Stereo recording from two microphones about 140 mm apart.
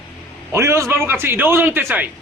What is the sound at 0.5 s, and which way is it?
A man's voice, 20° right (ahead or behind).